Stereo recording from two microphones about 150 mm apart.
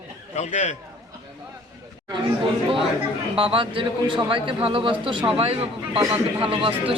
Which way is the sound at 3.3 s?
35° right (ahead or behind).